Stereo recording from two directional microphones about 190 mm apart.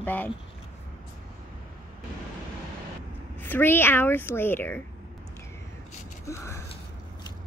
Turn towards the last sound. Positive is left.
turn(degrees=15)  # may be behind; listen again after turning